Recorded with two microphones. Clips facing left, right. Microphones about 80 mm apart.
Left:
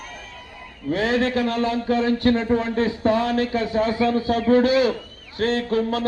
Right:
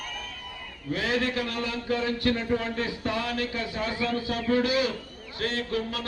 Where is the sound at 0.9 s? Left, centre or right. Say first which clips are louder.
Left 7 dB; left.